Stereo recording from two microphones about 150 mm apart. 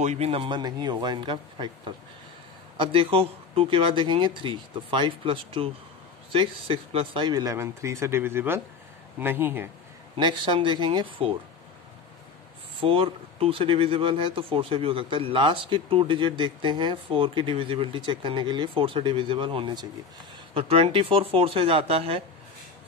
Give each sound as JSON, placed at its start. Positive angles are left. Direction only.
{"t": 0.0, "sound": "speech", "side_deg": -45}
{"t": 10.1, "sound": "speech", "side_deg": -30}
{"t": 12.8, "sound": "speech", "side_deg": -40}